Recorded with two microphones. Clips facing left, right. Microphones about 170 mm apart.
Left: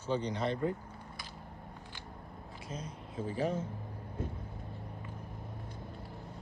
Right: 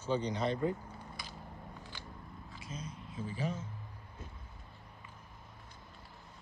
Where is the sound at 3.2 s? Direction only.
55° left (ahead or behind).